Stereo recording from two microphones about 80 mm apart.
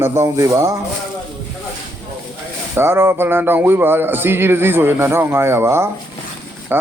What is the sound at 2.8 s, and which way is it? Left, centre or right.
A man's voice, right.